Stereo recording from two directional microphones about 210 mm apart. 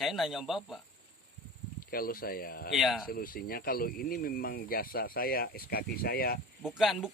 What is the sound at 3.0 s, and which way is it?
Speech, 45° left (ahead or behind).